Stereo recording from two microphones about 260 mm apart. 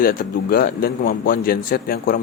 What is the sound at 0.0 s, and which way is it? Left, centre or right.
Speech, left.